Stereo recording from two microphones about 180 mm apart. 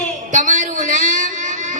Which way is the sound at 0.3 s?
45° right (ahead or behind).